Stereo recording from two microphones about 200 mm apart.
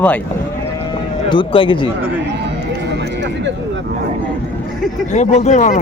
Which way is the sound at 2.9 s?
60° right (ahead or behind).